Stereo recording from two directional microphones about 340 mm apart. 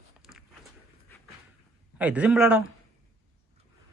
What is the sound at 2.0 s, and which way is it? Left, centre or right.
Speech, centre.